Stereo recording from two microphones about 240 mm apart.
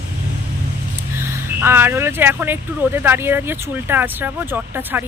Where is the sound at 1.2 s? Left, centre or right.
Centre.